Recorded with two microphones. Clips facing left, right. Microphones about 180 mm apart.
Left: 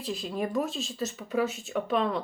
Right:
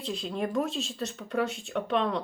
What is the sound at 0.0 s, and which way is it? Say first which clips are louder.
Speech: even; 5° left (ahead or behind).